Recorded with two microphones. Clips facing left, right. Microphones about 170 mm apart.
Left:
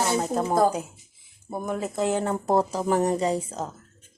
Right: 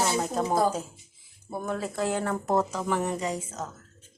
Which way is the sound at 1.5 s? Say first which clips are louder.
Left 2 dB; 15° left (ahead or behind).